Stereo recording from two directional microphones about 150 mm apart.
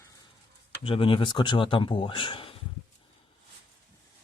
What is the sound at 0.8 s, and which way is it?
Speech, 35° left (ahead or behind).